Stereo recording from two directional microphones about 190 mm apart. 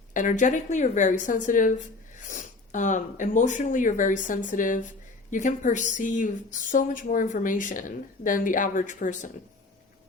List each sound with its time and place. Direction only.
0.1 s a woman's voice: 40° left (ahead or behind)